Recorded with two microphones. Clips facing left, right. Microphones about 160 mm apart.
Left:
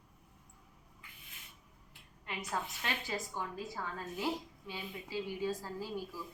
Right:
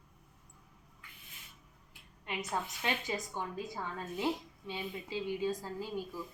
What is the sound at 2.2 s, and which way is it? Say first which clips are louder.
A woman's voice: right 2 dB; 20° right (ahead or behind).